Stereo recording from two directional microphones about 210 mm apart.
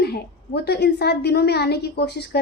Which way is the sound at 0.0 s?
50° left (ahead or behind).